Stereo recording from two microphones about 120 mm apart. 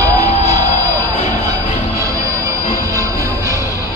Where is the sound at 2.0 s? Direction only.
25° right (ahead or behind).